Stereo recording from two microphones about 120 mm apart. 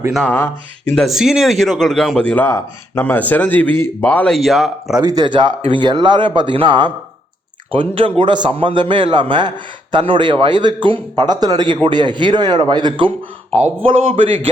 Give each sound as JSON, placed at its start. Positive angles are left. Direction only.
{"t": 0.3, "sound": "speech", "side_deg": 20}
{"t": 0.9, "sound": "a man's voice", "side_deg": 0}
{"t": 4.4, "sound": "speech", "side_deg": 0}
{"t": 4.9, "sound": "a man's voice", "side_deg": -35}